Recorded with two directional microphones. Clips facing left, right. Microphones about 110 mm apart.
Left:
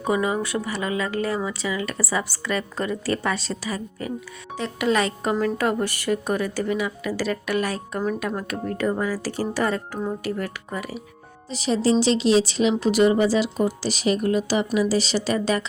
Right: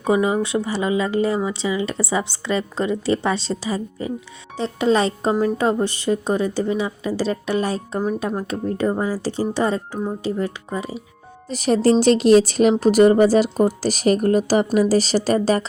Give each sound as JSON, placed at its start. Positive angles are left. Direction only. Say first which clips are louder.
{"t": 0.0, "sound": "speech", "louder": "right 4 dB", "side_deg": -25}
{"t": 11.4, "sound": "speech", "louder": "right 5 dB", "side_deg": -50}